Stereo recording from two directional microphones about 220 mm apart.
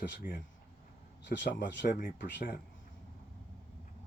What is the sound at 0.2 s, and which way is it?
Speech, 40° left (ahead or behind).